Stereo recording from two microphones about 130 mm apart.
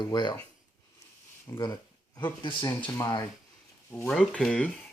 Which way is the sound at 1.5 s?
25° left (ahead or behind).